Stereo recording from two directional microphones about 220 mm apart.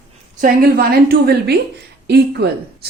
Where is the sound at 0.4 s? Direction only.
45° right (ahead or behind).